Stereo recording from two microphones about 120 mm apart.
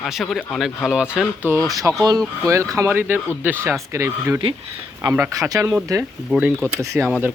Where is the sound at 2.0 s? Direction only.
30° right (ahead or behind).